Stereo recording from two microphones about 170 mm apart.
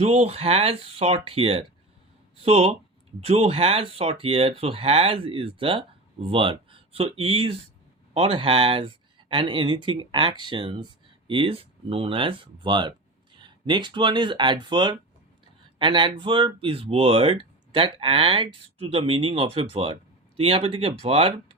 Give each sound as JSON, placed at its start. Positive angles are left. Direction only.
{"t": 0.0, "sound": "speech", "side_deg": -35}